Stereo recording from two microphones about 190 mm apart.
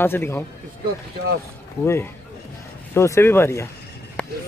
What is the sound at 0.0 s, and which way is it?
Speech, 10° left (ahead or behind).